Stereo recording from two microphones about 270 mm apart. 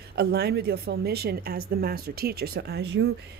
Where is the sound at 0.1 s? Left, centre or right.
Right.